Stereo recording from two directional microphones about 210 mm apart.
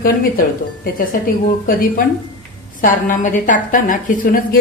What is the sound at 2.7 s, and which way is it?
A woman's voice, 40° left (ahead or behind).